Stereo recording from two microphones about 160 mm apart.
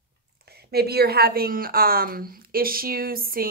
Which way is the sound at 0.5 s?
80° right.